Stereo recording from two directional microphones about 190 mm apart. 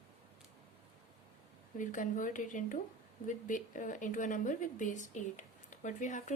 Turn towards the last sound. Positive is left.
turn(degrees=40)  # may be behind; listen again after turning